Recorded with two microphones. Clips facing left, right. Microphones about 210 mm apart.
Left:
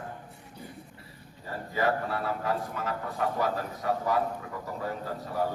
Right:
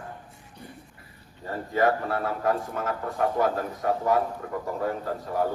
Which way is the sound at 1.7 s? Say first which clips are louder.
Right 4 dB; 50° right (ahead or behind).